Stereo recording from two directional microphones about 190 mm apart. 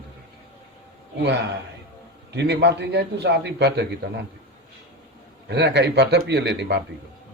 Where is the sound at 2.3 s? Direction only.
65° right (ahead or behind).